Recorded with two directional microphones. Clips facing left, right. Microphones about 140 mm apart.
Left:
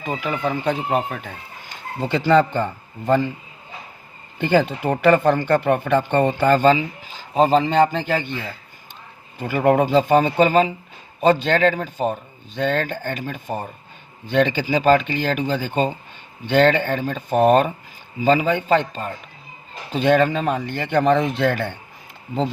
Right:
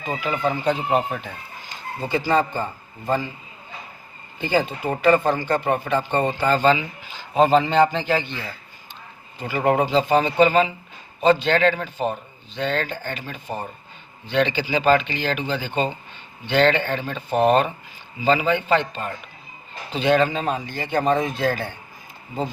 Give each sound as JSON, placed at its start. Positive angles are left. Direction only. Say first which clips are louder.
{"t": 0.2, "sound": "speech", "louder": "right 2 dB", "side_deg": 55}
{"t": 1.7, "sound": "speech", "louder": "left 2 dB", "side_deg": 65}
{"t": 4.4, "sound": "speech", "louder": "left 4 dB", "side_deg": 60}
{"t": 6.7, "sound": "a man's voice", "louder": "left 5 dB", "side_deg": 40}
{"t": 9.4, "sound": "speech", "louder": "left 3 dB", "side_deg": 50}